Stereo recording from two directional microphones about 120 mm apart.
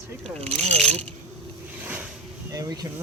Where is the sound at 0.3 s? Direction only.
15° left (ahead or behind).